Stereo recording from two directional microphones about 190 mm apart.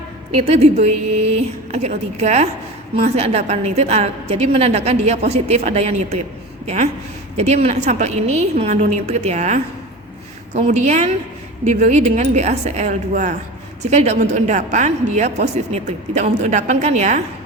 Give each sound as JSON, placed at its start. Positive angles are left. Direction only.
{"t": 0.4, "sound": "a woman's voice", "side_deg": -35}
{"t": 7.3, "sound": "a woman's voice", "side_deg": -35}